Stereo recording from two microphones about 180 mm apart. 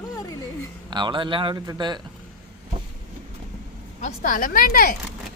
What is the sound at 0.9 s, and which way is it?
Speech, 25° right (ahead or behind).